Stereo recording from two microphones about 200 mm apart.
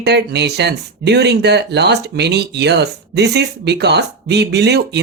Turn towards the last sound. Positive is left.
turn(degrees=-55)  # may be behind; listen again after turning